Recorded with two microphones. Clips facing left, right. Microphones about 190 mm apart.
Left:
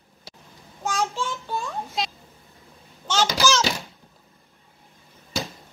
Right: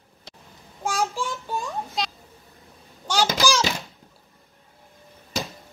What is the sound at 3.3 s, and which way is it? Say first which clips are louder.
Bouncing: left 2 dB; 15° right (ahead or behind).